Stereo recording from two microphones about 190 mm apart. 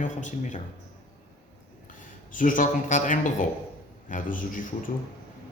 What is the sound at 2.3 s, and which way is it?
A man's voice, 45° left (ahead or behind).